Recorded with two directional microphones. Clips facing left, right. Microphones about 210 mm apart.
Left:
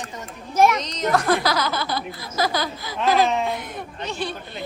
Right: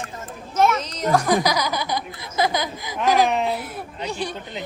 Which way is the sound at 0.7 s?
10° right (ahead or behind).